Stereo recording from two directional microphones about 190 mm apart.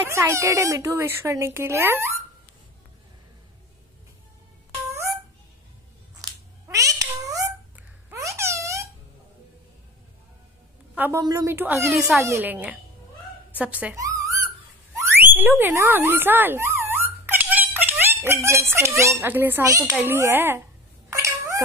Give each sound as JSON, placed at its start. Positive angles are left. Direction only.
{"t": 0.1, "sound": "speech", "side_deg": -15}
{"t": 6.2, "sound": "cat", "side_deg": -20}
{"t": 8.1, "sound": "babbling", "side_deg": -15}
{"t": 11.0, "sound": "speech", "side_deg": -15}
{"t": 13.6, "sound": "a sound", "side_deg": -10}
{"t": 15.0, "sound": "speech", "side_deg": -10}
{"t": 21.1, "sound": "a sound", "side_deg": -15}